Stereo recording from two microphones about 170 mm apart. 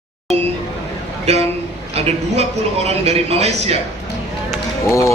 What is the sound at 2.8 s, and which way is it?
Speech, 40° right (ahead or behind).